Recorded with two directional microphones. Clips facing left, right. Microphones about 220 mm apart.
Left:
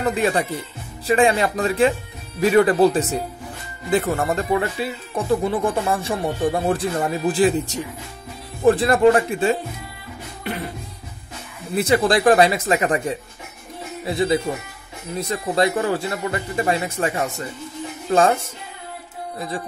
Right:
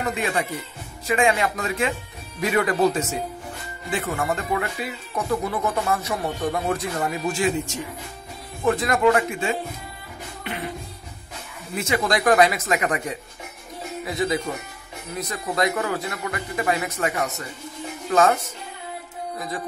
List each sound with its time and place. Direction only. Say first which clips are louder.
0.0 s speech: left 5 dB; 35° left (ahead or behind)
11.7 s speech: left 6 dB; 35° left (ahead or behind)